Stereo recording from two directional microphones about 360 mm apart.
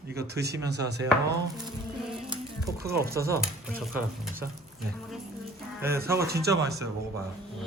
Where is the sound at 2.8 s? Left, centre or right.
Right.